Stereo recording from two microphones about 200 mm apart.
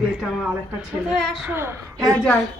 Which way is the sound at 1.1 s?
5° right (ahead or behind).